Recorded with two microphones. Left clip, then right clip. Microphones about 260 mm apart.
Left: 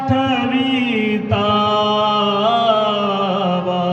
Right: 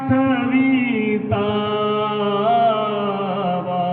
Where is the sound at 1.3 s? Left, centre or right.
Left.